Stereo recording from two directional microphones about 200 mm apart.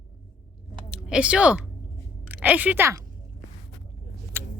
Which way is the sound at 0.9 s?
5° right (ahead or behind).